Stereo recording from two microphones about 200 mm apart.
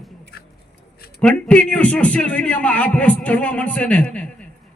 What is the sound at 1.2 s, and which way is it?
A man's voice, 5° left (ahead or behind).